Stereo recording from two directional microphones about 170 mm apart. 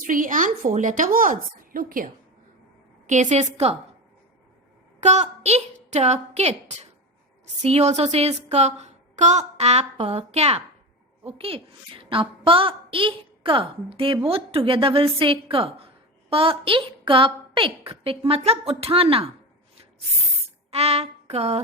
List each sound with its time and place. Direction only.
0.0 s speech: 55° right (ahead or behind)
3.1 s speech: 45° right (ahead or behind)
4.9 s a woman's voice: 40° right (ahead or behind)
20.7 s child singing: 35° right (ahead or behind)